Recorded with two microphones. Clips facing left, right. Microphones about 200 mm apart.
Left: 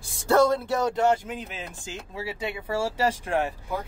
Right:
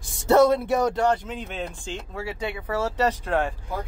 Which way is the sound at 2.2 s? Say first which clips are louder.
Right 1 dB; 25° left (ahead or behind).